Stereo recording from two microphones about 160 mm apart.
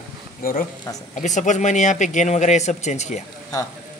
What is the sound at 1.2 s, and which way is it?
Speech, 50° left (ahead or behind).